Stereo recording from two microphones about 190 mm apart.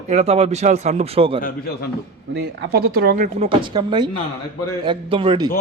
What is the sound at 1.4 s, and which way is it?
Speech, 50° left (ahead or behind).